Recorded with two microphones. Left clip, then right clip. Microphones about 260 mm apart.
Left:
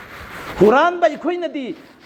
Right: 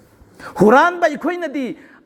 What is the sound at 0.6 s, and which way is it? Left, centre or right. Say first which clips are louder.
A man's voice: right 1 dB; right.